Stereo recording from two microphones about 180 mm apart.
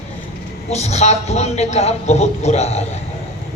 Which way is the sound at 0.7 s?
35° left (ahead or behind).